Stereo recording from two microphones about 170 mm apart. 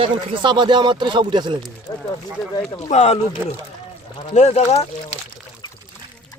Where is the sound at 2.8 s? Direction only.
40° left (ahead or behind).